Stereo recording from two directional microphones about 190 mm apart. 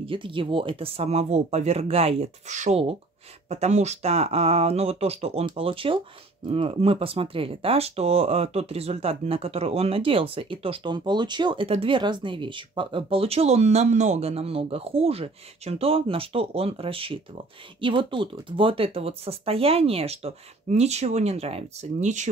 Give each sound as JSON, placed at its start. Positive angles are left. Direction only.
{"t": 0.0, "sound": "speech", "side_deg": -25}